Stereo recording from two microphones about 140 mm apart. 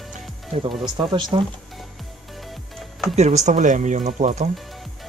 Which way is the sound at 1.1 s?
35° right (ahead or behind).